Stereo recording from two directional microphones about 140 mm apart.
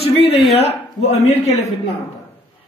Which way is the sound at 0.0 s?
45° left (ahead or behind).